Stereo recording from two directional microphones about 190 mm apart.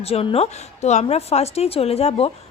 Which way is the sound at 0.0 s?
30° left (ahead or behind).